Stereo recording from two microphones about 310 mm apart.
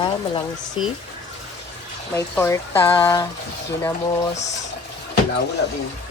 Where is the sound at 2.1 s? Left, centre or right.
Centre.